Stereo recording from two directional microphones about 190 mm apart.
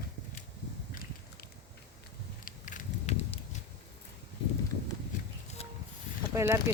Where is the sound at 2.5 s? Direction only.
45° left (ahead or behind).